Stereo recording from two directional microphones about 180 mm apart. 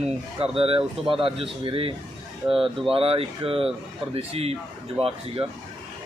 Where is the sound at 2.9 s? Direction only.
30° right (ahead or behind).